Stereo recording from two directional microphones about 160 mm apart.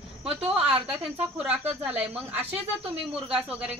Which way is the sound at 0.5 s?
5° right (ahead or behind).